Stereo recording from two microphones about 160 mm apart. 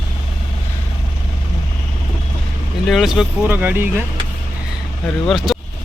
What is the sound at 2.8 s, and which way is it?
Speech, centre (ahead or behind).